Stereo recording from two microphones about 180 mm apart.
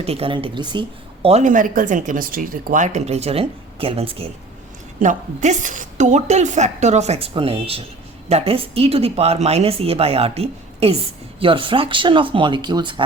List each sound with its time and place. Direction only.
0.0 s speech: 35° right (ahead or behind)
4.9 s speech: 45° right (ahead or behind); by 13.1 s 25° right (ahead or behind)